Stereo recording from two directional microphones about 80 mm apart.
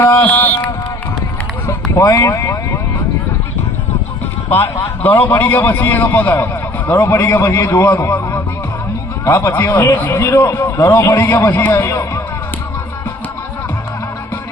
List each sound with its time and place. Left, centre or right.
0.2 s mantra: left
1.6 s speech: left
5.0 s a man's voice: left
9.2 s a man's voice: left
11.0 s a man's voice: left